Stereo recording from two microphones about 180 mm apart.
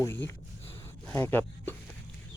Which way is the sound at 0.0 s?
15° left (ahead or behind).